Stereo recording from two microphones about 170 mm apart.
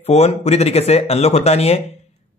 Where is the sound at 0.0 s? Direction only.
40° left (ahead or behind).